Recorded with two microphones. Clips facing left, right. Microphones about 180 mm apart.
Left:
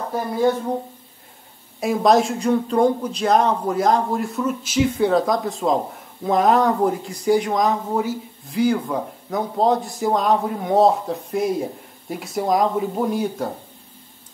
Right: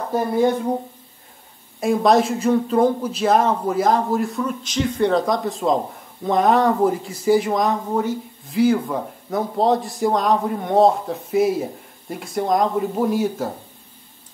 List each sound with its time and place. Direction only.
0.4 s speech: 15° right (ahead or behind)
1.8 s speech: centre (ahead or behind)